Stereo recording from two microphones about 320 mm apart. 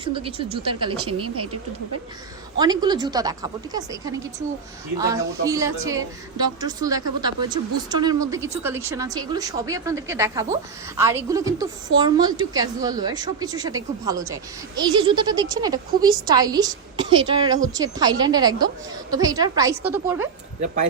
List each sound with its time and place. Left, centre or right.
0.0 s a woman's voice: centre
0.9 s speech: right
2.6 s a woman's voice: centre